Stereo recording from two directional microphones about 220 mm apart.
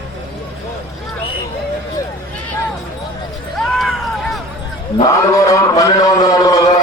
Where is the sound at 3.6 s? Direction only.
Centre (ahead or behind).